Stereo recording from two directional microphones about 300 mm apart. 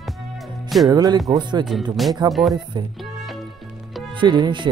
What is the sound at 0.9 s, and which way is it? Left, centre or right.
Speech, centre.